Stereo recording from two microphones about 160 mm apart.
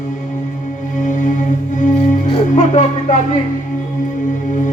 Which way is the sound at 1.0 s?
50° left (ahead or behind).